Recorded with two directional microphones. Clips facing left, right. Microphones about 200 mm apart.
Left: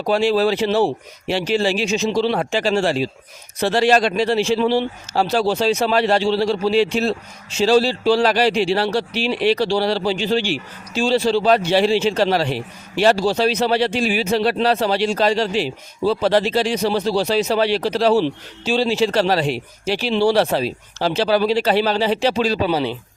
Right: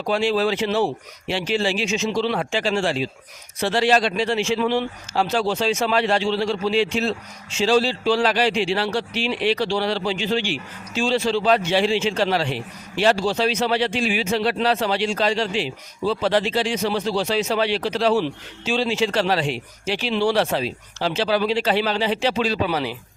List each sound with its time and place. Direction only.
0.1 s speech: 40° left (ahead or behind)